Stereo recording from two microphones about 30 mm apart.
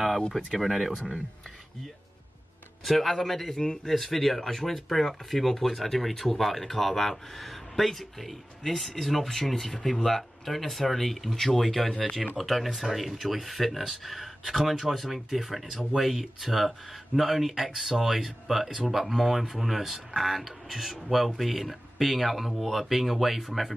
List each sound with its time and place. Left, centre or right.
0.3 s speech: centre
2.8 s speech: centre
3.5 s speech: left
3.8 s speech: centre